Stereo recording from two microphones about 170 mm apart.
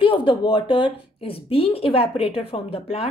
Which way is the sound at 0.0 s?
30° left (ahead or behind).